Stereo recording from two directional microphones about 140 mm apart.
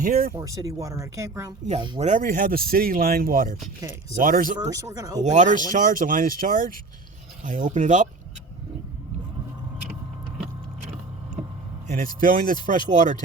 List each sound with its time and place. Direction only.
0.0 s speech: 90° right
0.3 s speech: 20° right (ahead or behind)
2.0 s speech: 65° right (ahead or behind)
3.8 s speech: 25° right (ahead or behind)
4.2 s speech: 80° right
4.7 s speech: 25° right (ahead or behind)
5.2 s speech: 60° right (ahead or behind)
11.9 s speech: 80° right; by 13.2 s 60° right (ahead or behind)